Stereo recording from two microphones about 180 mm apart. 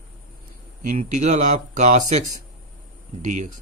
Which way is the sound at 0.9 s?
40° right (ahead or behind).